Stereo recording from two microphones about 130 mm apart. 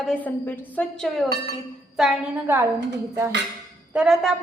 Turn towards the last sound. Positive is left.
turn(degrees=0)  # may be behind; listen again after turning